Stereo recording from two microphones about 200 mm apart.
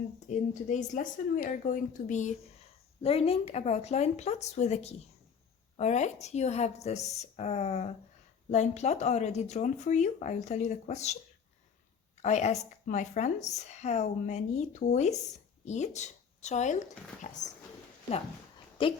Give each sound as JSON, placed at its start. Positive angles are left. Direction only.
{"t": 0.3, "sound": "speech", "side_deg": 40}
{"t": 12.2, "sound": "speech", "side_deg": 35}
{"t": 18.8, "sound": "speech", "side_deg": 25}